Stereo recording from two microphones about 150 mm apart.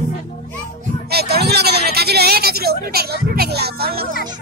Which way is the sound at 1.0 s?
90° right.